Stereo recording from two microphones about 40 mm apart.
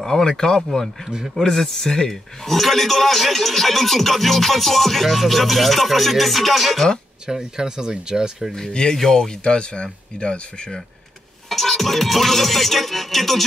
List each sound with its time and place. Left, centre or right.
0.0 s a man's voice: centre
7.2 s speech: centre
8.9 s speech: centre
11.4 s a man's voice: centre